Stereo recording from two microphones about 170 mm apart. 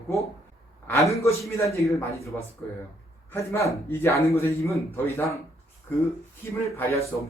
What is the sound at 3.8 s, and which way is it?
A man's voice, 15° left (ahead or behind).